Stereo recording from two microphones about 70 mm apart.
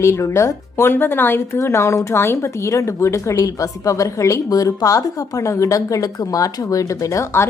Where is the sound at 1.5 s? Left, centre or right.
Left.